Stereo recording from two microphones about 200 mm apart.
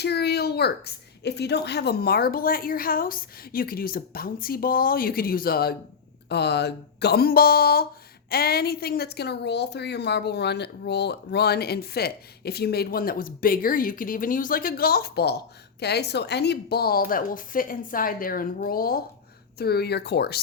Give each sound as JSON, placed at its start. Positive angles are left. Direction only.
{"t": 0.0, "sound": "a woman's voice", "side_deg": 55}